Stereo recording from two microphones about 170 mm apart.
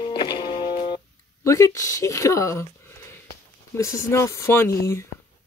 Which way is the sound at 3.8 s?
15° left (ahead or behind).